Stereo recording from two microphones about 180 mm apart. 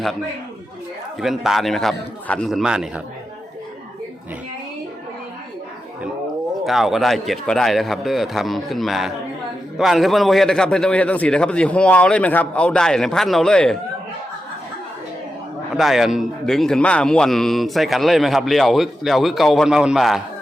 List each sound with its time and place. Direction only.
1.2 s a man's voice: centre (ahead or behind)
6.7 s a man's voice: centre (ahead or behind)
15.7 s a man's voice: centre (ahead or behind)